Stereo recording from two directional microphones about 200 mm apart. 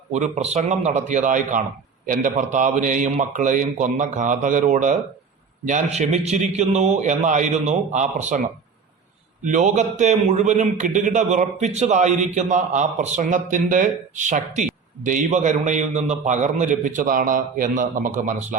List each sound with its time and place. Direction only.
0.1 s a man's voice: 35° right (ahead or behind)